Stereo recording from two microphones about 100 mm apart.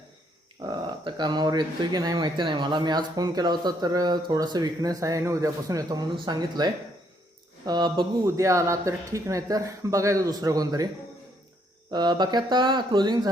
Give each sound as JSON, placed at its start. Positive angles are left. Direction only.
{"t": 0.6, "sound": "speech", "side_deg": -50}
{"t": 8.4, "sound": "speech", "side_deg": -30}
{"t": 11.9, "sound": "speech", "side_deg": -45}